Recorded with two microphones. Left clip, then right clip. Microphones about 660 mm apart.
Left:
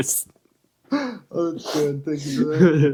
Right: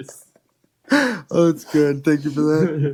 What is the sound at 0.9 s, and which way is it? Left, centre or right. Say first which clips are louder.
Speech: right 8 dB; right.